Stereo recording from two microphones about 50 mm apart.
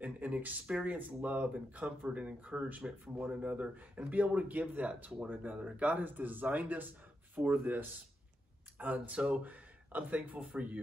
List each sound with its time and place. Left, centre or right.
0.0 s a sound: right
0.7 s speech: right
9.4 s speech: right